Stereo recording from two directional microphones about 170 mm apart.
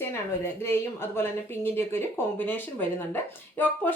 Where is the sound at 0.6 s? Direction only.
15° left (ahead or behind).